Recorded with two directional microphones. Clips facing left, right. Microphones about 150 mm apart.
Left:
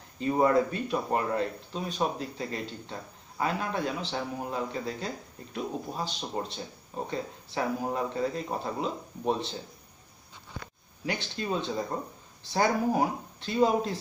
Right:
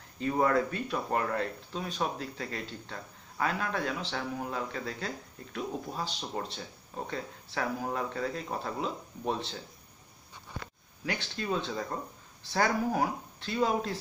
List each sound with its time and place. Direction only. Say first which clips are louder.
0.2 s speech: left 3 dB; 20° left (ahead or behind)
11.1 s speech: left 2 dB; 25° left (ahead or behind)